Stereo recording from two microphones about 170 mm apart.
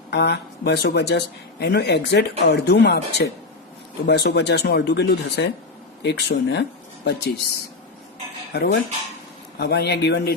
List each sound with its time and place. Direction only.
0.1 s speech: 75° left (ahead or behind)
6.0 s speech: 85° left
8.5 s speech: 75° left (ahead or behind)